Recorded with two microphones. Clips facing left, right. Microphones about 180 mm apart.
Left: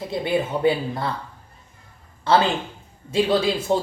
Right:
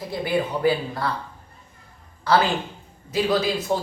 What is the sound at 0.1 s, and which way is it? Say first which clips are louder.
A man's voice: left 1 dB; 25° left (ahead or behind).